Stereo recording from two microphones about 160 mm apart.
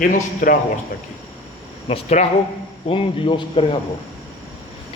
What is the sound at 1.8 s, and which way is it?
A man's voice, 40° left (ahead or behind).